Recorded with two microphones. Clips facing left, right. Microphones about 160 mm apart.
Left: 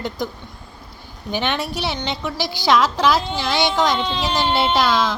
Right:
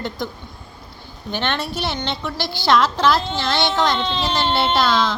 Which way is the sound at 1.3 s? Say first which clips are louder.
Left 1 dB; 5° left (ahead or behind).